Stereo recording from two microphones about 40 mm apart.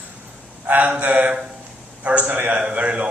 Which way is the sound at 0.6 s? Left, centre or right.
Right.